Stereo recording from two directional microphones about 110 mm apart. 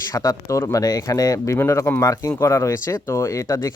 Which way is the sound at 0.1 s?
30° left (ahead or behind).